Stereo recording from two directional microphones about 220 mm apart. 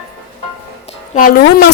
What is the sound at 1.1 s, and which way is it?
Speech, 40° left (ahead or behind).